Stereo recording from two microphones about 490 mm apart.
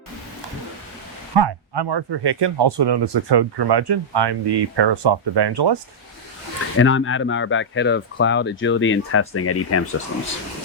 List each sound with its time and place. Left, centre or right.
1.3 s speech: right
6.7 s speech: left